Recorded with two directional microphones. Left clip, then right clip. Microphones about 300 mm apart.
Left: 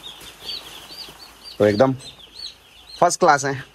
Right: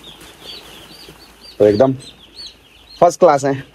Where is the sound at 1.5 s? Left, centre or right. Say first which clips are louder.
Right 5 dB; centre.